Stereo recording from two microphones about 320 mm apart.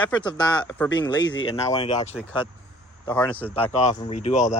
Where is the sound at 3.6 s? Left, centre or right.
Centre.